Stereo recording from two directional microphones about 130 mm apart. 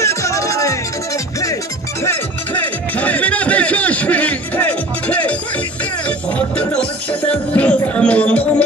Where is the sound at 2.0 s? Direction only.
15° left (ahead or behind).